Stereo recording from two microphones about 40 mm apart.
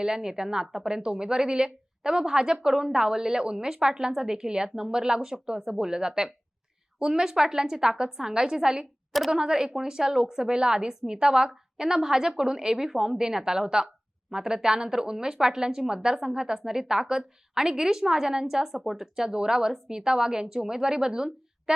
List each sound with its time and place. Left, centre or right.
0.0 s a woman's voice: centre